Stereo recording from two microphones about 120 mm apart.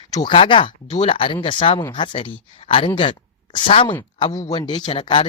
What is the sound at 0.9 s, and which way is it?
A woman's voice, 55° left (ahead or behind).